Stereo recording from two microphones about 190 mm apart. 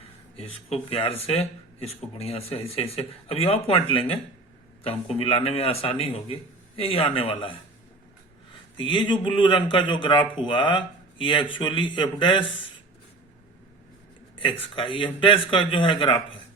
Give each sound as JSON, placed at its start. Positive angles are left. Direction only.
{"t": 0.9, "sound": "speech", "side_deg": 30}
{"t": 5.1, "sound": "speech", "side_deg": 30}
{"t": 8.8, "sound": "a man's voice", "side_deg": 25}
{"t": 14.3, "sound": "a man's voice", "side_deg": 25}